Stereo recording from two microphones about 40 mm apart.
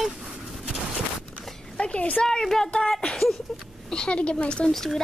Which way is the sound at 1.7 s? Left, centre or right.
Left.